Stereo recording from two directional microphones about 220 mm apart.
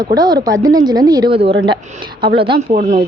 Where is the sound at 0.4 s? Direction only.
15° right (ahead or behind); by 3.0 s 35° right (ahead or behind).